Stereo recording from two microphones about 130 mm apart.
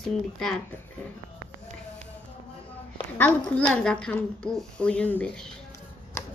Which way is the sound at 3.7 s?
5° left (ahead or behind).